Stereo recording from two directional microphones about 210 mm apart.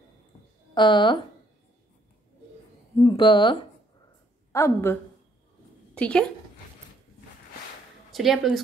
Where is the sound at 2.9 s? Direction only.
20° left (ahead or behind).